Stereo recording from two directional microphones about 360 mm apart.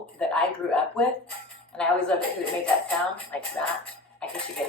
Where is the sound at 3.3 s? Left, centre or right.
Centre.